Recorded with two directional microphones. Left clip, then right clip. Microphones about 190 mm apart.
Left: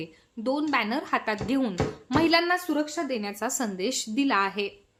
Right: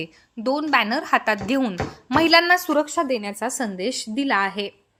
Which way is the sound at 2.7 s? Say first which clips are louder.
Right 7 dB; 30° right (ahead or behind).